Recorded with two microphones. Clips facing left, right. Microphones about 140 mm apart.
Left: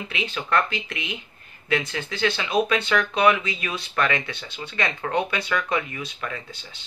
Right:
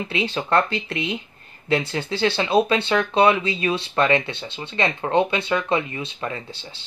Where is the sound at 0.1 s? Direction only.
30° right (ahead or behind).